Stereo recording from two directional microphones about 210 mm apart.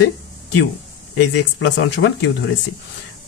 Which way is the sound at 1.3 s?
55° left (ahead or behind).